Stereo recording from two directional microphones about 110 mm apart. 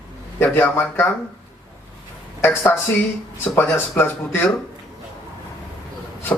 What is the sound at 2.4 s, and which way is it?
Speech, 20° left (ahead or behind).